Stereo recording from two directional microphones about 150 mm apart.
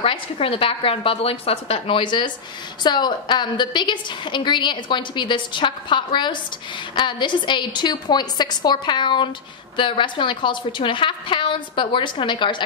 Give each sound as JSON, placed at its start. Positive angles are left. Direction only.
{"t": 0.0, "sound": "a woman's voice", "side_deg": 40}